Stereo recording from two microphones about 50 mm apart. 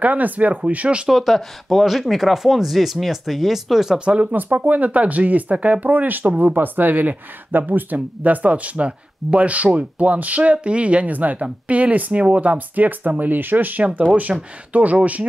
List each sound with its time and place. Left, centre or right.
0.0 s speech: right
1.0 s speech: centre
4.0 s speech: right
4.3 s speech: right